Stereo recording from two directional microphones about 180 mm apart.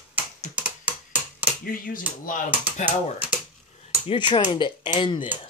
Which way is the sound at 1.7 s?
50° left (ahead or behind).